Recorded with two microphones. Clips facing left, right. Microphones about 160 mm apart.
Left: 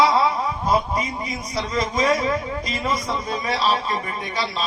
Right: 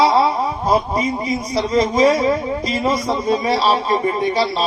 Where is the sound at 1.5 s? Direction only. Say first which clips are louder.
Right 7 dB; 30° right (ahead or behind).